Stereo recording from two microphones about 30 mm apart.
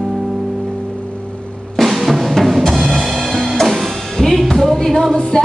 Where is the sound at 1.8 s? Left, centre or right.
Centre.